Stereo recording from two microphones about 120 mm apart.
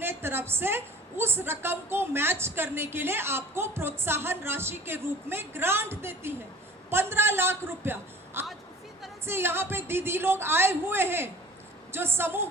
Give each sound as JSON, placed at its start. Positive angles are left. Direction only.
{"t": 0.0, "sound": "a woman's voice", "side_deg": -20}
{"t": 6.9, "sound": "a sound", "side_deg": -20}
{"t": 9.2, "sound": "a woman's voice", "side_deg": -20}